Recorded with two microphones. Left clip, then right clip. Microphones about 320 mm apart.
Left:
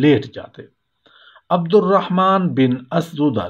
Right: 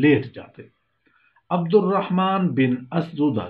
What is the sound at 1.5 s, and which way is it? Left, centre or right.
Speech, left.